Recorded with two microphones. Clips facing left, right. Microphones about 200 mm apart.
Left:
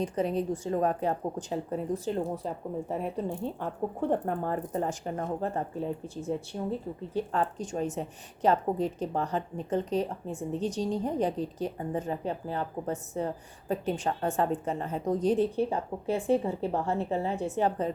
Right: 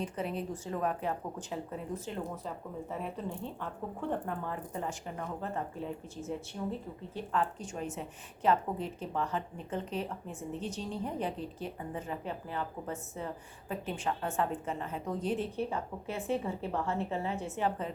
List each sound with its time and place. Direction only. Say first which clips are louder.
0.0 s a woman's voice: left 7 dB; 35° left (ahead or behind)
7.9 s a woman's voice: left 6 dB; 40° left (ahead or behind)